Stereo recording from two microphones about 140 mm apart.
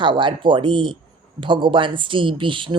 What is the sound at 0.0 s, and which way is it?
Speech, 35° right (ahead or behind).